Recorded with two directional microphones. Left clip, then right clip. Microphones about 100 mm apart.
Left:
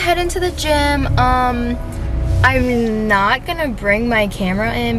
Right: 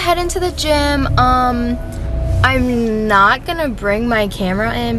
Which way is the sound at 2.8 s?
15° right (ahead or behind).